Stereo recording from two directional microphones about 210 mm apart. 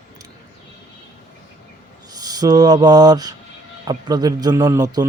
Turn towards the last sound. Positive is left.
turn(degrees=-15)  # may be behind; listen again after turning